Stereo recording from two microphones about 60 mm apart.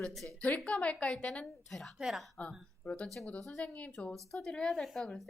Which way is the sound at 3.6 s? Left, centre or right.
Left.